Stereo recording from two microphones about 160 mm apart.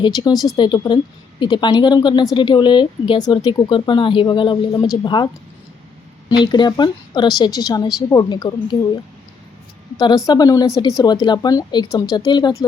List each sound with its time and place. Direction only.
0.0 s speech: 30° left (ahead or behind)
10.2 s speech: 20° left (ahead or behind)